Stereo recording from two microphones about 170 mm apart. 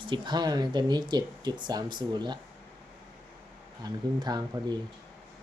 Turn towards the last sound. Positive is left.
turn(degrees=-25)  # may be behind; listen again after turning